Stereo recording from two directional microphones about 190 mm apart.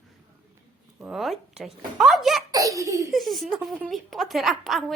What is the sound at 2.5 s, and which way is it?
Speech, 15° right (ahead or behind).